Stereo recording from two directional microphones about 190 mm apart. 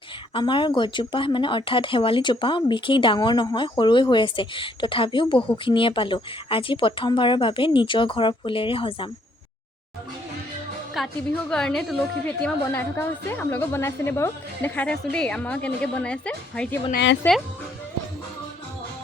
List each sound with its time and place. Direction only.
0.3 s speech: 25° left (ahead or behind)
10.9 s a woman's voice: centre (ahead or behind)